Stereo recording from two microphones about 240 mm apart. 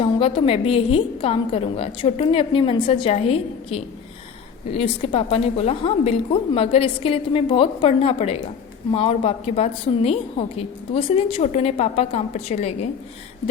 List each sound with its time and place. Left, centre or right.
0.0 s a woman's voice: left